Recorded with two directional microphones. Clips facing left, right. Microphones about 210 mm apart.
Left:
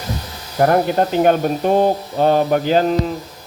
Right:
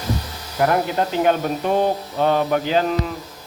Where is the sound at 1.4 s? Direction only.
35° left (ahead or behind).